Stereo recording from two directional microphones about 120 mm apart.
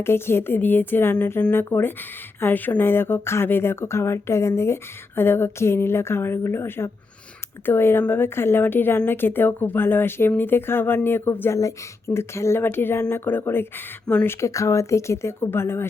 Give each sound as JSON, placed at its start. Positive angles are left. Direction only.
{"t": 0.0, "sound": "a woman's voice", "side_deg": 20}
{"t": 14.4, "sound": "speech", "side_deg": 25}